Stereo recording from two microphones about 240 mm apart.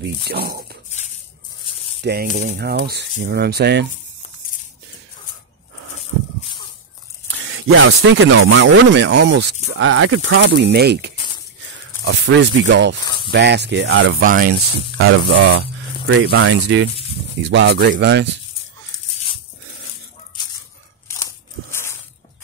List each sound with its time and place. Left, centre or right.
0.0 s speech: right
2.0 s speech: right
7.5 s speech: right
13.0 s snake: centre
13.3 s speech: right
14.2 s speech: right
15.0 s speech: right
21.1 s a sound: centre